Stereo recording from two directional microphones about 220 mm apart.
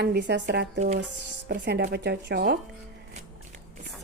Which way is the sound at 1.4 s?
45° right (ahead or behind).